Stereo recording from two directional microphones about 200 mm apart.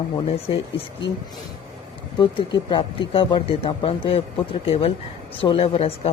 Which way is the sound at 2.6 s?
25° left (ahead or behind).